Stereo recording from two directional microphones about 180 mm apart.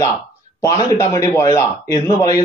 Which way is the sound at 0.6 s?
15° left (ahead or behind).